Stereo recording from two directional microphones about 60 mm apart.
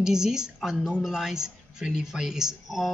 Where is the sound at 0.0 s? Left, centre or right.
Centre.